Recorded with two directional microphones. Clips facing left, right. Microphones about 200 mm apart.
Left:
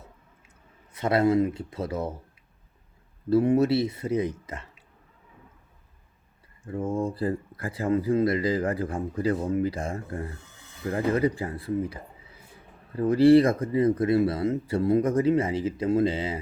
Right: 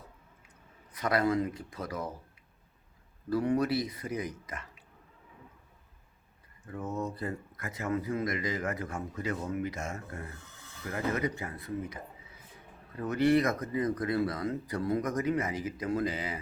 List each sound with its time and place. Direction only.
0.9 s speech: 25° left (ahead or behind)
3.2 s speech: 25° left (ahead or behind)
6.7 s speech: 30° left (ahead or behind)